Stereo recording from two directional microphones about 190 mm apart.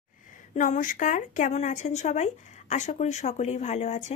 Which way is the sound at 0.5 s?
40° left (ahead or behind).